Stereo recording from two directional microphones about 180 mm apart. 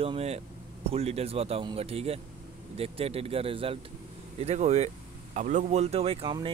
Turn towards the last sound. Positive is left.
turn(degrees=-25)  # may be behind; listen again after turning